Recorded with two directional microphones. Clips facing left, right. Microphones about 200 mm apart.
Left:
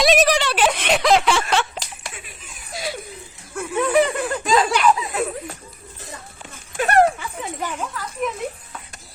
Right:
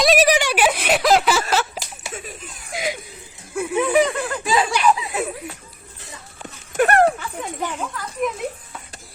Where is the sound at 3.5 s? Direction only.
5° right (ahead or behind).